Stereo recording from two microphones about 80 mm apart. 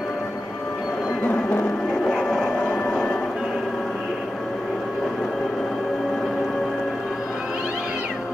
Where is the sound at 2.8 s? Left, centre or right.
Centre.